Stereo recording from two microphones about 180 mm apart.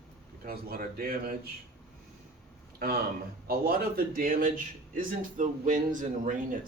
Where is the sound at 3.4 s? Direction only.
55° right (ahead or behind).